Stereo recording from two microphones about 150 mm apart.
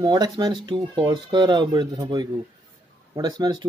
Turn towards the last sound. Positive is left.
turn(degrees=-25)  # may be behind; listen again after turning